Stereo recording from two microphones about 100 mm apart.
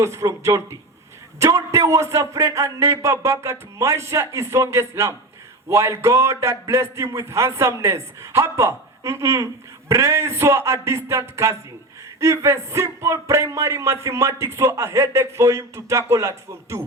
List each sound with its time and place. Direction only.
0.0 s speech: 30° right (ahead or behind)